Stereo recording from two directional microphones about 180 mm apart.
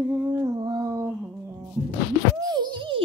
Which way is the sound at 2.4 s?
25° right (ahead or behind).